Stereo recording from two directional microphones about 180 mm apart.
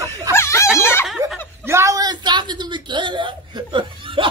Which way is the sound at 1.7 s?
15° right (ahead or behind).